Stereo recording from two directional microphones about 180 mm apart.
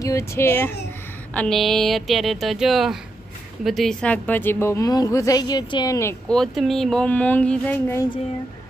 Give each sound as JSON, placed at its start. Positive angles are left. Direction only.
{"t": 0.0, "sound": "a woman's voice", "side_deg": 15}
{"t": 6.3, "sound": "speech", "side_deg": 0}